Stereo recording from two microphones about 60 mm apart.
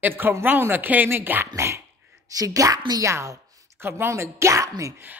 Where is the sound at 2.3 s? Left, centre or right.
Right.